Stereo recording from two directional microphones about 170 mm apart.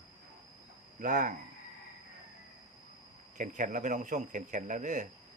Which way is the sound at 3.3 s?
50° right (ahead or behind).